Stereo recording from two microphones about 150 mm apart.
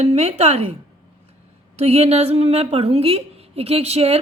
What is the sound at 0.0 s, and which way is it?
A woman's voice, 45° right (ahead or behind).